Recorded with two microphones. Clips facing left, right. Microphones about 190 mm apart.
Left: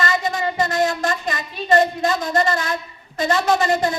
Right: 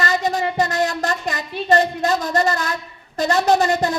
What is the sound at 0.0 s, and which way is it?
Child singing, 35° right (ahead or behind).